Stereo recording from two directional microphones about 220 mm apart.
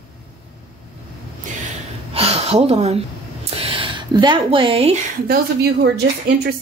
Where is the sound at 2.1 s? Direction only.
25° right (ahead or behind).